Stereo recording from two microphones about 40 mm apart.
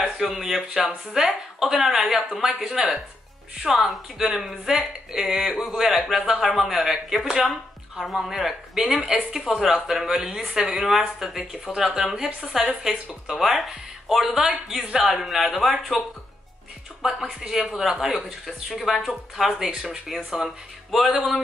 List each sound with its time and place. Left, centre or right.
0.2 s speech: centre
3.6 s a man's voice: centre
4.7 s a man's voice: centre
11.7 s a man's voice: centre
17.0 s speech: centre
18.0 s a man's voice: centre